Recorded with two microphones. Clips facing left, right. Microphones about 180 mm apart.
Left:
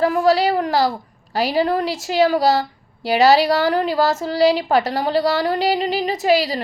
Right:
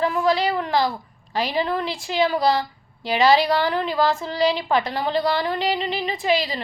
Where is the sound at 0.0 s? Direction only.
40° left (ahead or behind).